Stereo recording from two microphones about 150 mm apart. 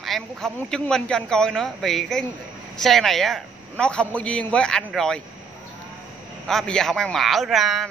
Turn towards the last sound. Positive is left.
turn(degrees=0)  # may be behind; listen again after turning